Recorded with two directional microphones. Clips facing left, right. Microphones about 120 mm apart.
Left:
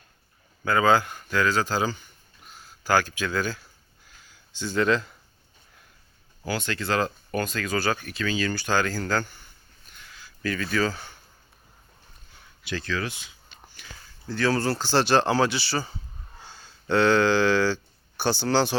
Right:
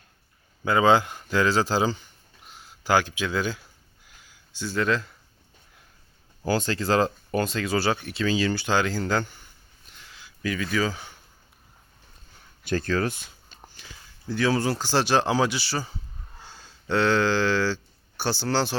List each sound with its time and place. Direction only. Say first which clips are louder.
0.6 s speech: right 1 dB; 20° right (ahead or behind); by 5.1 s centre (ahead or behind)
6.4 s speech: right 4 dB; 35° right (ahead or behind); by 9.2 s 20° right (ahead or behind)
9.8 s a sound: left 1 dB; 25° right (ahead or behind)
10.4 s speech: even; 10° right (ahead or behind)
12.6 s speech: right 5 dB; 45° right (ahead or behind)
13.8 s speech: left 3 dB; 35° right (ahead or behind)
14.3 s speech: even; 15° right (ahead or behind)